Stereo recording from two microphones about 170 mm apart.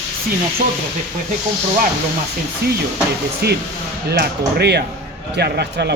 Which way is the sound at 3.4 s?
65° right (ahead or behind).